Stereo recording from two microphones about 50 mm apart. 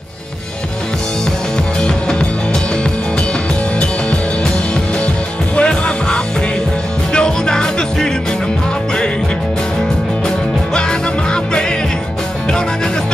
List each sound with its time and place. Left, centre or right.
1.8 s music: centre
5.6 s music: centre
10.7 s music: centre